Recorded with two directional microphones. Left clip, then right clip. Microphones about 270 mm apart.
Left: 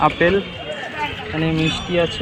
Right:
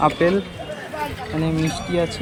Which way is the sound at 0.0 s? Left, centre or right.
Centre.